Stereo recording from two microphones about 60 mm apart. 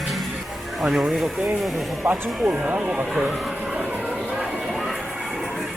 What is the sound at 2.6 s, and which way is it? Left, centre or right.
Speech, centre.